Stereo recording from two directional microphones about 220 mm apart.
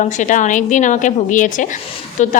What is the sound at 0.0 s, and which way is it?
A woman's voice, 35° left (ahead or behind).